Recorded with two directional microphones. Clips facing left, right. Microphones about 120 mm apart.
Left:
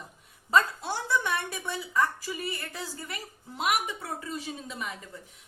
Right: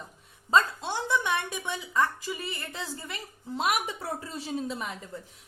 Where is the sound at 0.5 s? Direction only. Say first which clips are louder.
Right 1 dB; 20° right (ahead or behind).